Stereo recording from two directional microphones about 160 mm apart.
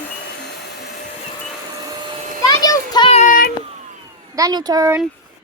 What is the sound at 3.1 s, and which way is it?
Child singing, 50° left (ahead or behind).